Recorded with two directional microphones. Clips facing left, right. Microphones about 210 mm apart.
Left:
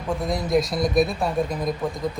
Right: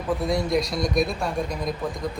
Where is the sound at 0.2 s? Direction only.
Centre (ahead or behind).